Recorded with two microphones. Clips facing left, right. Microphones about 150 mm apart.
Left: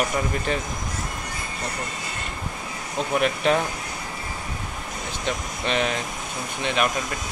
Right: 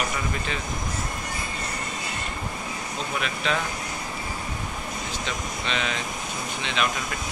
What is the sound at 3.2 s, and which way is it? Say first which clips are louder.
Speech: left 7 dB; 55° left (ahead or behind).